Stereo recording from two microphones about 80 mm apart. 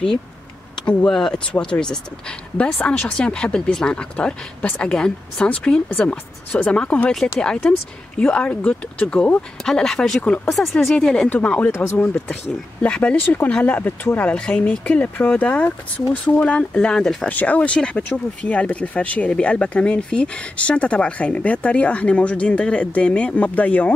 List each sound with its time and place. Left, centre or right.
0.8 s speech: centre
10.5 s speech: centre
17.3 s speech: centre